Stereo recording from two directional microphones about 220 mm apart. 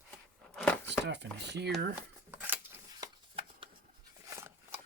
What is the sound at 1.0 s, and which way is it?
Speech, 50° right (ahead or behind).